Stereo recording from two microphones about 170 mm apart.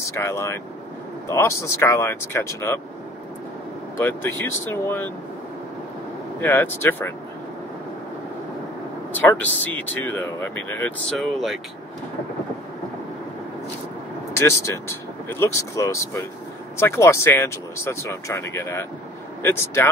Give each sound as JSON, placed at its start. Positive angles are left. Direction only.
{"t": 0.1, "sound": "speech", "side_deg": 15}
{"t": 4.0, "sound": "speech", "side_deg": 15}
{"t": 6.4, "sound": "speech", "side_deg": 15}
{"t": 9.1, "sound": "speech", "side_deg": 10}
{"t": 14.4, "sound": "speech", "side_deg": 15}